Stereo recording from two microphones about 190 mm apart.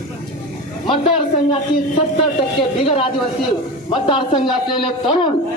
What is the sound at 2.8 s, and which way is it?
A woman's voice, 30° left (ahead or behind).